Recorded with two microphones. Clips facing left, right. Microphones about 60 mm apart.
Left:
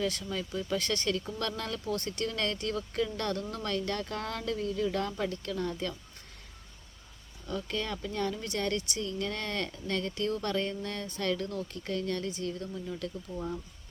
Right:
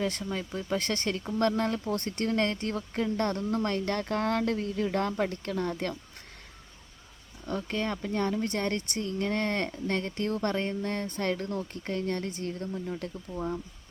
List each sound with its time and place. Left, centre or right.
0.0 s speech: right
7.4 s speech: right